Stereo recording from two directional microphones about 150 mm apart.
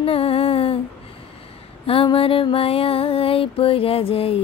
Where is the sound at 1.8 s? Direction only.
40° left (ahead or behind).